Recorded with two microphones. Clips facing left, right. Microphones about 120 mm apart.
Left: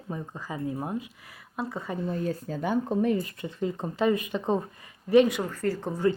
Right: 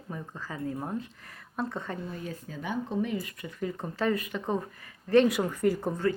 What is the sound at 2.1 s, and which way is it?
Speech, 35° left (ahead or behind).